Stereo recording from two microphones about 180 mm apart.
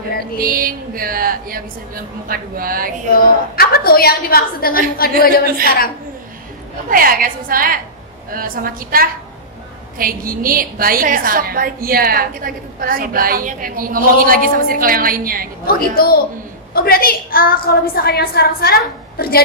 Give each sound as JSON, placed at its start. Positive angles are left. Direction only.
{"t": 0.3, "sound": "a woman's voice", "side_deg": -50}
{"t": 3.2, "sound": "a woman's voice", "side_deg": 55}
{"t": 6.9, "sound": "a woman's voice", "side_deg": -50}
{"t": 15.6, "sound": "a woman's voice", "side_deg": 55}